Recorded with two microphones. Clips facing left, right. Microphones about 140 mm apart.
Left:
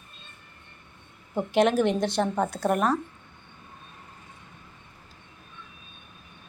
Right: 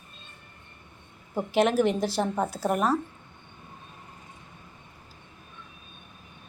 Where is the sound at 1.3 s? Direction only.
5° right (ahead or behind).